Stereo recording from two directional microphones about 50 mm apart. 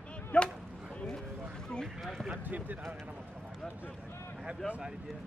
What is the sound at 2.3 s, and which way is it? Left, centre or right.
Speech, right.